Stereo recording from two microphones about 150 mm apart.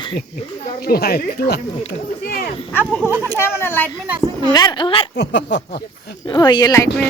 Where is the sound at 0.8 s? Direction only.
90° left.